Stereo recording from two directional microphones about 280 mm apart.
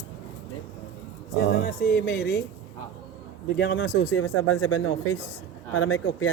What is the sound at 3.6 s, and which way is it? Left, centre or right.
Speech, left.